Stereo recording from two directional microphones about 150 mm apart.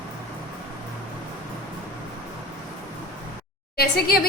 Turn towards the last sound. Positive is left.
turn(degrees=90)